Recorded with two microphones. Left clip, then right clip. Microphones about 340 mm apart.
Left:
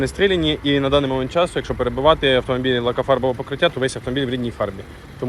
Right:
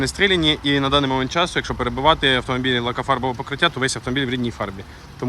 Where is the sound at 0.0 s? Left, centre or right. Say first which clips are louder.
Even; centre.